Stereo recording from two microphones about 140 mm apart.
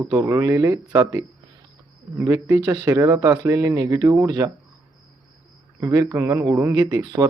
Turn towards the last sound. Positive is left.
turn(degrees=-25)  # may be behind; listen again after turning